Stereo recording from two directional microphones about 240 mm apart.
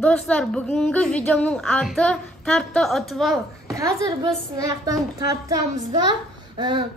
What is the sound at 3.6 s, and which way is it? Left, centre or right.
A woman's voice, centre.